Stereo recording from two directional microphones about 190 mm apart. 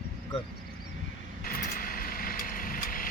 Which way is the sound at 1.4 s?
50° left (ahead or behind).